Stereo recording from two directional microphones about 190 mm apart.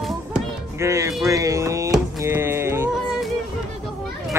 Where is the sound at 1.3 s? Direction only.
15° right (ahead or behind).